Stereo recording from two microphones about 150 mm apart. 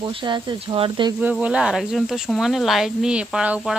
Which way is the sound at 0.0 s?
30° right (ahead or behind).